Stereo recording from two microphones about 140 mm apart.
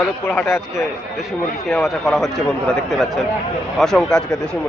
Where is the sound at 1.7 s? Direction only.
Centre (ahead or behind).